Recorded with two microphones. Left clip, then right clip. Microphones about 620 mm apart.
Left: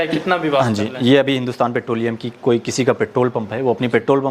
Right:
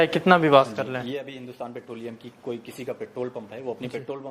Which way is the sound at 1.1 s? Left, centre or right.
Left.